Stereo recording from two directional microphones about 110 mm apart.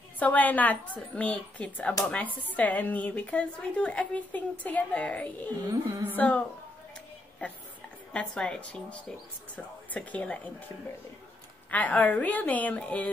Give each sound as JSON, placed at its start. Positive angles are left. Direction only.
{"t": 0.2, "sound": "speech", "side_deg": 15}
{"t": 5.7, "sound": "speech", "side_deg": -35}
{"t": 6.1, "sound": "speech", "side_deg": 10}
{"t": 8.1, "sound": "speech", "side_deg": 5}
{"t": 11.7, "sound": "speech", "side_deg": 15}